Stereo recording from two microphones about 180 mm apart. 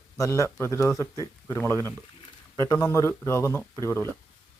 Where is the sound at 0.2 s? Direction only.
15° left (ahead or behind).